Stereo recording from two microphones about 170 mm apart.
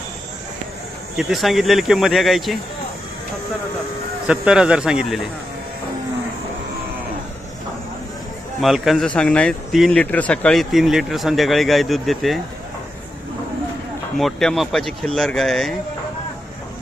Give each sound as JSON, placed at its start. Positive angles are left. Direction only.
{"t": 1.1, "sound": "speech", "side_deg": 0}
{"t": 4.3, "sound": "speech", "side_deg": -5}
{"t": 8.6, "sound": "speech", "side_deg": 0}
{"t": 14.2, "sound": "speech", "side_deg": 0}